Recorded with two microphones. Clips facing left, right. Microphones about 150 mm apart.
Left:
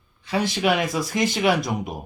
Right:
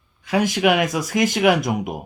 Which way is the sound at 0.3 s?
15° right (ahead or behind).